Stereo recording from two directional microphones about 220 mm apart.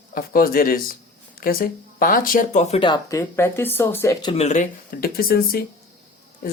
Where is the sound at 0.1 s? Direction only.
40° left (ahead or behind).